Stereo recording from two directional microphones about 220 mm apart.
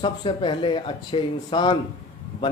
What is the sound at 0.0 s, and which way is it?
A man's voice, 20° left (ahead or behind).